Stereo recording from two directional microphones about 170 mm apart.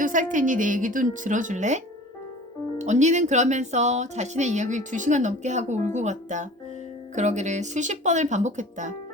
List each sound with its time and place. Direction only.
0.0 s speech: 50° right (ahead or behind)